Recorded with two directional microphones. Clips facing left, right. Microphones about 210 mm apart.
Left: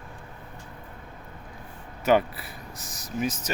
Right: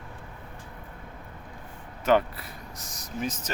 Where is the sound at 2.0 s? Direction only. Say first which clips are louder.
Left 1 dB; 10° left (ahead or behind).